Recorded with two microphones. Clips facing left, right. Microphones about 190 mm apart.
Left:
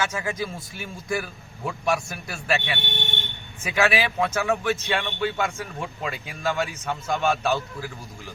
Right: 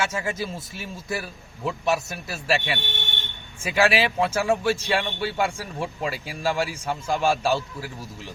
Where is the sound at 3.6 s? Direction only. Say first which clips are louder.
Right 2 dB; 30° right (ahead or behind).